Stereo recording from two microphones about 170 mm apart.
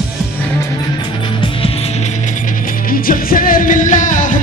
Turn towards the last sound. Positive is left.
turn(degrees=50)  # may be behind; listen again after turning